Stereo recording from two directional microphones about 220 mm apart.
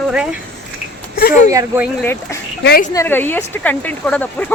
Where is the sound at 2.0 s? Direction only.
10° left (ahead or behind).